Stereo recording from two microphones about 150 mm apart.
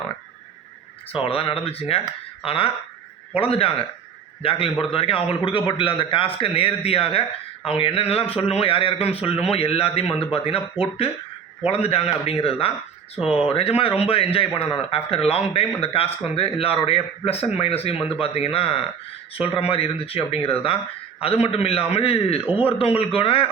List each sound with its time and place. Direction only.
1.1 s a man's voice: 40° left (ahead or behind)